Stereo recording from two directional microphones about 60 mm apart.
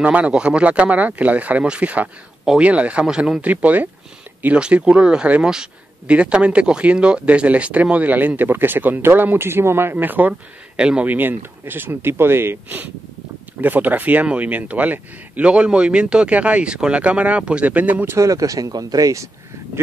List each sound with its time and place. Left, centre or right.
0.0 s speech: right
10.8 s speech: centre
11.1 s speech: right
18.1 s speech: right